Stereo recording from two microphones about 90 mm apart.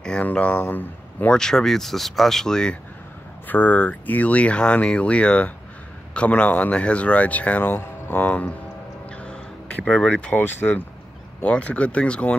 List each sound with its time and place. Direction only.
0.0 s speech: 15° left (ahead or behind)
1.3 s speech: 5° left (ahead or behind)
3.4 s speech: 20° left (ahead or behind)
9.2 s music: 15° left (ahead or behind)
9.8 s speech: 10° left (ahead or behind)
10.4 s speech: 25° left (ahead or behind)
11.4 s speech: 15° left (ahead or behind)